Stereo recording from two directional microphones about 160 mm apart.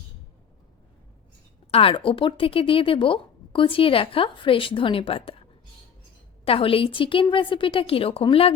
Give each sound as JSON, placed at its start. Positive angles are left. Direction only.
{"t": 1.7, "sound": "speech", "side_deg": 35}